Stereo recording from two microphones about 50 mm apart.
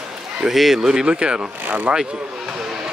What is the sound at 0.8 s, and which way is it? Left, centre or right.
Speech, centre.